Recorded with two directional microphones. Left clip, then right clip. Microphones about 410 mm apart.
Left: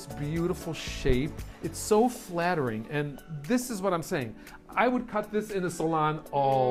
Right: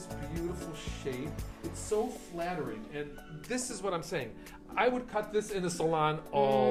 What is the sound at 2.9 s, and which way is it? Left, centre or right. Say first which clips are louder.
Speech: left 7 dB; left.